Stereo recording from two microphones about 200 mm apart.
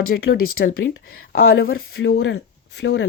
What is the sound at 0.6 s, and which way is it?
Speech, 50° left (ahead or behind).